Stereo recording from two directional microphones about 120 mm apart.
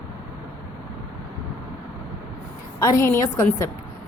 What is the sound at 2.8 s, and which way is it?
Speech, 25° left (ahead or behind).